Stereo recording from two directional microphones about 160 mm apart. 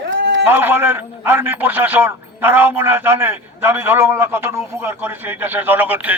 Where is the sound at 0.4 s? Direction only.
15° right (ahead or behind).